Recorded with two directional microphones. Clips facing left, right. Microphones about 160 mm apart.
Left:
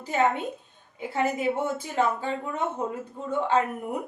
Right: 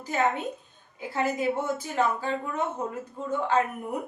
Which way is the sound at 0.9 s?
25° left (ahead or behind).